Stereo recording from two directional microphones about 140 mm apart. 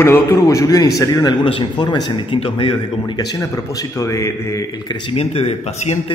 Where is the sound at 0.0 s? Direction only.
20° left (ahead or behind).